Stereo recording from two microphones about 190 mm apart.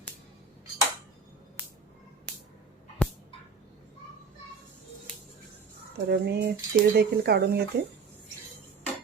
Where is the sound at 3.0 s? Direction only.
5° left (ahead or behind).